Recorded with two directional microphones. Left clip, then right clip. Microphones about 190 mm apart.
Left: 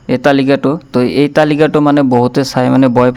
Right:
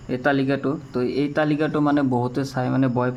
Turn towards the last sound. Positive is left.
turn(degrees=60)  # may be behind; listen again after turning